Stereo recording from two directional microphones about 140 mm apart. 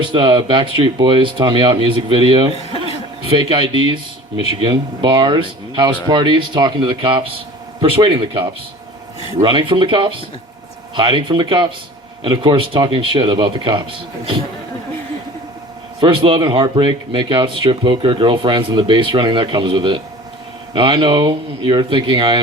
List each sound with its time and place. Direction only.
0.0 s speech: 35° right (ahead or behind)
16.0 s speech: 35° right (ahead or behind)